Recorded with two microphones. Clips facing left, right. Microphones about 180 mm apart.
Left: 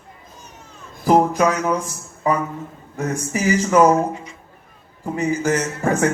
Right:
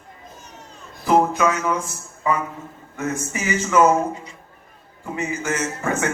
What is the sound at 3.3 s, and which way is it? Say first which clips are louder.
Speech: left 7 dB; 35° left (ahead or behind).